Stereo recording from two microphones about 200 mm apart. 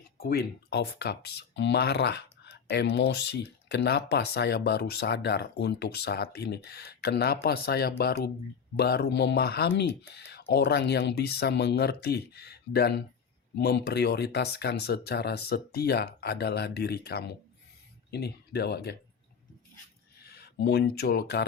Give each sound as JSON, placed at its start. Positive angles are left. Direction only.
{"t": 0.2, "sound": "speech", "side_deg": 50}
{"t": 20.3, "sound": "speech", "side_deg": 55}